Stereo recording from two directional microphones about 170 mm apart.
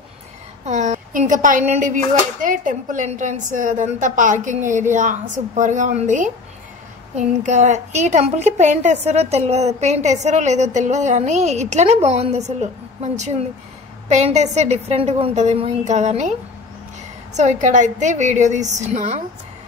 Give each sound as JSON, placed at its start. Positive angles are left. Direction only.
{"t": 0.7, "sound": "a woman's voice", "side_deg": -45}